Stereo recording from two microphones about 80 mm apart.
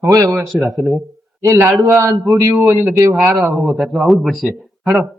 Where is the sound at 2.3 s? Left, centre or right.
Right.